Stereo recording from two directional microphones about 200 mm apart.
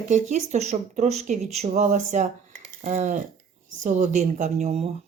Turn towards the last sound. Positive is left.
turn(degrees=-30)  # may be behind; listen again after turning